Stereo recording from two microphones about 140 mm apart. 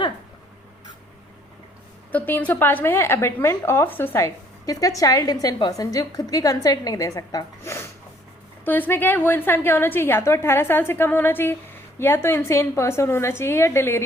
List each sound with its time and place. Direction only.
2.1 s a woman's voice: 10° left (ahead or behind)